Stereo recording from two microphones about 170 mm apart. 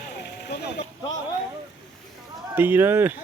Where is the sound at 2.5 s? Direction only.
10° right (ahead or behind).